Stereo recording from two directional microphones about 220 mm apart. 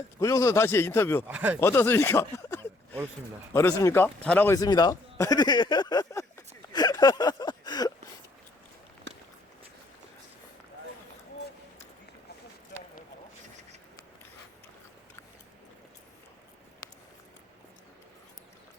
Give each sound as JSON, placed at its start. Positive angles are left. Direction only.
{"t": 0.2, "sound": "a man's voice", "side_deg": 15}
{"t": 1.3, "sound": "speech", "side_deg": -5}
{"t": 1.6, "sound": "a man's voice", "side_deg": 10}
{"t": 6.7, "sound": "a sound", "side_deg": 20}